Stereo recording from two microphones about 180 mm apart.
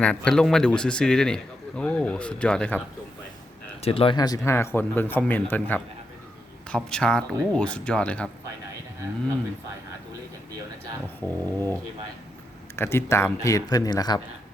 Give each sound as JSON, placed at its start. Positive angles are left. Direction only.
{"t": 0.0, "sound": "a man's voice", "side_deg": 5}
{"t": 3.8, "sound": "a man's voice", "side_deg": 30}
{"t": 11.2, "sound": "speech", "side_deg": 10}